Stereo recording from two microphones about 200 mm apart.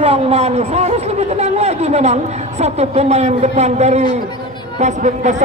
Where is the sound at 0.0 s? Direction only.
30° right (ahead or behind).